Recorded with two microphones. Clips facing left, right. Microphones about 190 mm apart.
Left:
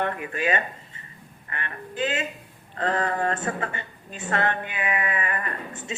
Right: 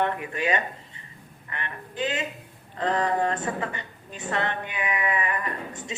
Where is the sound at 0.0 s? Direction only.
50° left (ahead or behind).